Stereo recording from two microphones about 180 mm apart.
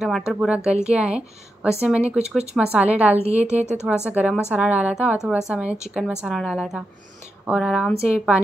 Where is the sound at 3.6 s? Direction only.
40° right (ahead or behind).